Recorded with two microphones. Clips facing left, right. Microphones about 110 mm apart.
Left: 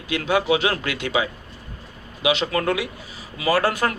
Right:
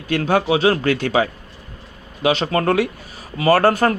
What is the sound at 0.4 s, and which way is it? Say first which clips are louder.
Speech: right 5 dB; 35° right (ahead or behind).